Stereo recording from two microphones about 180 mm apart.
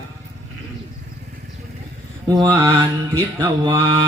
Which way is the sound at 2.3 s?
20° right (ahead or behind).